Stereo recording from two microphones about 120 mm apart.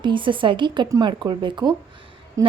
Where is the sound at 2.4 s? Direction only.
30° right (ahead or behind).